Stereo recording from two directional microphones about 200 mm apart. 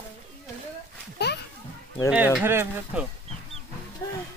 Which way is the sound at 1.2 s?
55° left (ahead or behind).